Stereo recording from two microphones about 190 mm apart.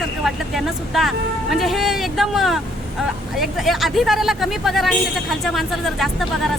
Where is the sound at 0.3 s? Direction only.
Centre (ahead or behind).